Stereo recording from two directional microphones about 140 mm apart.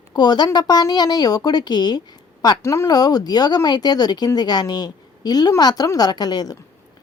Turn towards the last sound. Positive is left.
turn(degrees=30)  # may be behind; listen again after turning